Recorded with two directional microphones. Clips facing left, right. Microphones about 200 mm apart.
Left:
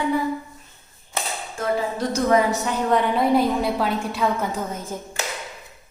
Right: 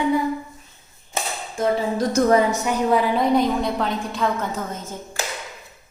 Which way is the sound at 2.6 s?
5° right (ahead or behind).